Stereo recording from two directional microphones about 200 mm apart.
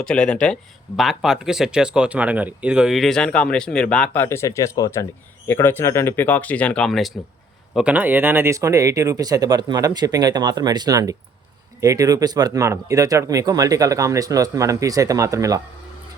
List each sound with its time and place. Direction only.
0.0 s speech: 5° left (ahead or behind); by 15.6 s 15° right (ahead or behind)